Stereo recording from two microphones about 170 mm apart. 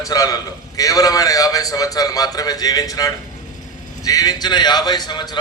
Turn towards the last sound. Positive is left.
turn(degrees=25)  # may be behind; listen again after turning